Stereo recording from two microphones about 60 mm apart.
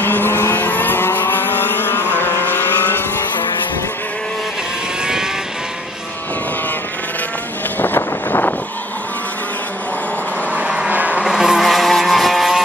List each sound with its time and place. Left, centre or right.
0.0 s vehicle: left
0.6 s vehicle: left
7.8 s wind noise: left
10.5 s vehicle: right
11.2 s vehicle: centre